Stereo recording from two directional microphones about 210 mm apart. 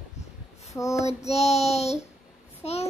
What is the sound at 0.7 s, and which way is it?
Child singing, 15° left (ahead or behind).